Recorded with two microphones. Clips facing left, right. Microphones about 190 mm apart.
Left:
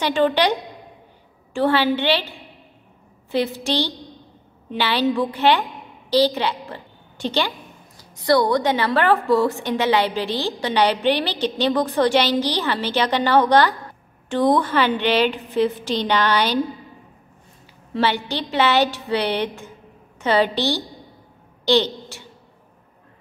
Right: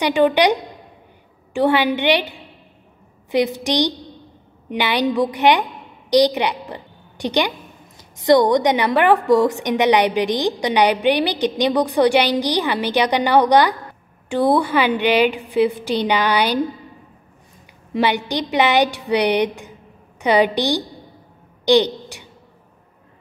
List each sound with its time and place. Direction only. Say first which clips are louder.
0.0 s a woman's voice: right 3 dB; 15° right (ahead or behind)
17.9 s a woman's voice: right 2 dB; 15° right (ahead or behind)